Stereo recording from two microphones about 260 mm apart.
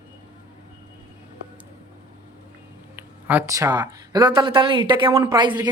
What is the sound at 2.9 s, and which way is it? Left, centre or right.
A man's voice, centre.